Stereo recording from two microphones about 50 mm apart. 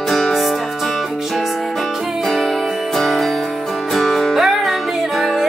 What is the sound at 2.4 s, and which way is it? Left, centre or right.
Music, centre.